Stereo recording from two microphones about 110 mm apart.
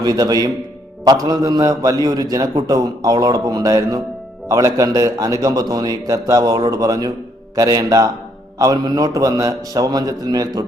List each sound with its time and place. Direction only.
0.0 s a man's voice: 35° right (ahead or behind)